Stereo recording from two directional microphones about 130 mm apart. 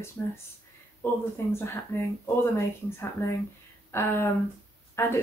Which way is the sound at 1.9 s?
20° left (ahead or behind).